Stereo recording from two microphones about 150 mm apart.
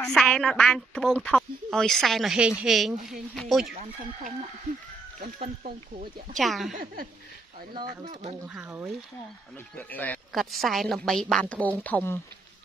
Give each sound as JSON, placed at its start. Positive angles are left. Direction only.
{"t": 0.0, "sound": "speech", "side_deg": 5}
{"t": 5.4, "sound": "speech", "side_deg": -55}
{"t": 6.3, "sound": "speech", "side_deg": 0}
{"t": 6.7, "sound": "speech", "side_deg": -70}
{"t": 8.5, "sound": "speech", "side_deg": -10}
{"t": 9.8, "sound": "speech", "side_deg": 10}
{"t": 10.3, "sound": "speech", "side_deg": 0}